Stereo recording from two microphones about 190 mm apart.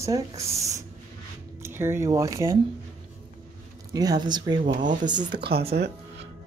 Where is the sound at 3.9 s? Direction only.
20° right (ahead or behind).